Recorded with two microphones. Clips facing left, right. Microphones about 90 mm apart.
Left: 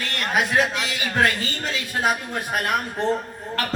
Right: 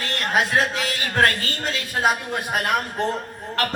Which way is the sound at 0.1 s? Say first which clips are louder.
Right 1 dB; 35° right (ahead or behind).